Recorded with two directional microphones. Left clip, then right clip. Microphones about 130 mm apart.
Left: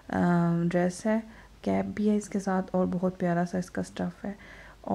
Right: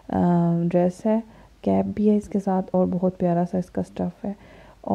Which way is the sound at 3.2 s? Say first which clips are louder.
Right 6 dB; 40° right (ahead or behind).